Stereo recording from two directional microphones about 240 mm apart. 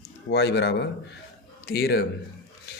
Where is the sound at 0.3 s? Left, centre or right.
Left.